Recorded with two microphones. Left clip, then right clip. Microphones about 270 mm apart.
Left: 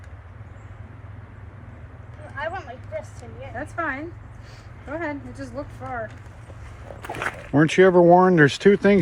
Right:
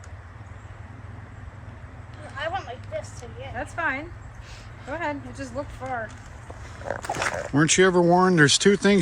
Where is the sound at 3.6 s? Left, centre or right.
Centre.